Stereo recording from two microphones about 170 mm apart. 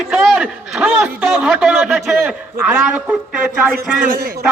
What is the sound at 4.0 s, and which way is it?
Speech, 55° right (ahead or behind).